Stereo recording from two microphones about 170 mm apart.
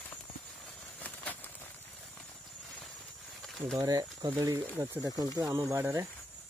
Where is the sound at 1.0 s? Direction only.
10° left (ahead or behind).